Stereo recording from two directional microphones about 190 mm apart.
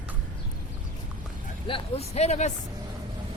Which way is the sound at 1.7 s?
35° left (ahead or behind).